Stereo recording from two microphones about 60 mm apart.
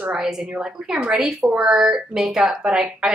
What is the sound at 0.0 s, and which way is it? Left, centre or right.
A woman's voice, centre.